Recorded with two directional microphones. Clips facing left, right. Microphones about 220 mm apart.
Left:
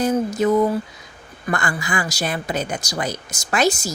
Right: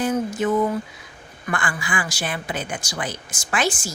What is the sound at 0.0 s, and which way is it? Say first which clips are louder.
Speech: left 3 dB; 40° left (ahead or behind).